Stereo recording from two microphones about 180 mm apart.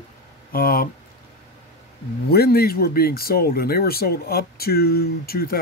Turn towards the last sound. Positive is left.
turn(degrees=55)  # may be behind; listen again after turning